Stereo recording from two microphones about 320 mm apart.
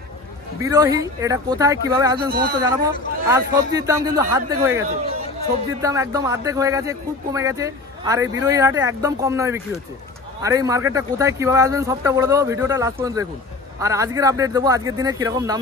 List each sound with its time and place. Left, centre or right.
0.6 s speech: centre
2.1 s speech: right
2.6 s speech: centre